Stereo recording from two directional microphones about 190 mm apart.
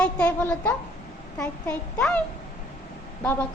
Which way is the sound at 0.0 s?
5° left (ahead or behind).